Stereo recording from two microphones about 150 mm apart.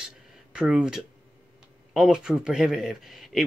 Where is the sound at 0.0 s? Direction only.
5° right (ahead or behind).